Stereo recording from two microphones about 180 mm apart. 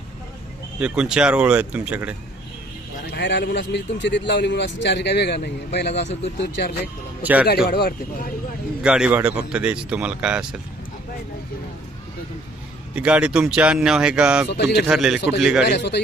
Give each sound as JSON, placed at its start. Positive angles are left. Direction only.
{"t": 0.8, "sound": "speech", "side_deg": -5}
{"t": 3.1, "sound": "speech", "side_deg": 75}
{"t": 7.2, "sound": "a man's voice", "side_deg": -10}
{"t": 7.7, "sound": "speech", "side_deg": 60}
{"t": 8.8, "sound": "speech", "side_deg": -5}
{"t": 12.9, "sound": "speech", "side_deg": -5}
{"t": 14.5, "sound": "speech", "side_deg": 70}
{"t": 14.8, "sound": "speech", "side_deg": -5}
{"t": 15.6, "sound": "speech", "side_deg": 70}